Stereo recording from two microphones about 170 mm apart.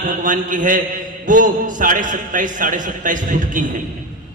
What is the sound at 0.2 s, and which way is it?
A man's voice, 50° right (ahead or behind).